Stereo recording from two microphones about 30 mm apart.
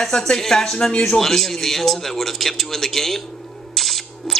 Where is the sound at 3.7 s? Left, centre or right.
Centre.